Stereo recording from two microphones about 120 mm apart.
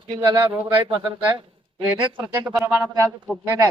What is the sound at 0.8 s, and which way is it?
Speech, 45° right (ahead or behind).